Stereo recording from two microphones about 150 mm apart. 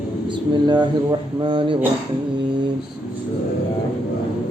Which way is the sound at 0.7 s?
30° right (ahead or behind).